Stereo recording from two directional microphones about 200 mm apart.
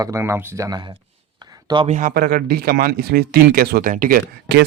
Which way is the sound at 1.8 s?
40° right (ahead or behind).